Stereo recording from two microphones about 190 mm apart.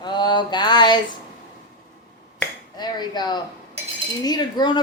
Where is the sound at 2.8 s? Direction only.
20° left (ahead or behind).